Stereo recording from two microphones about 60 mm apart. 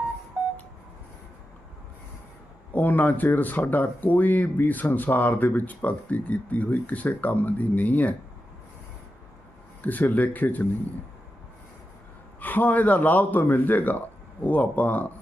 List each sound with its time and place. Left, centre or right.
2.7 s speech: left
9.8 s speech: left
12.4 s speech: left